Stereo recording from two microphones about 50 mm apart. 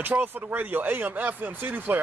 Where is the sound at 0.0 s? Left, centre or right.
Right.